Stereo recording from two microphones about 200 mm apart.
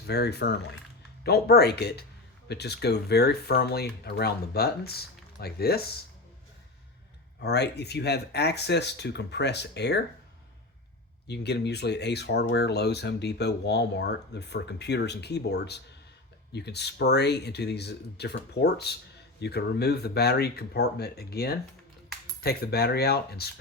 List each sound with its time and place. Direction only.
0.0 s speech: 55° left (ahead or behind)
7.4 s speech: 55° left (ahead or behind)
11.3 s speech: 55° left (ahead or behind)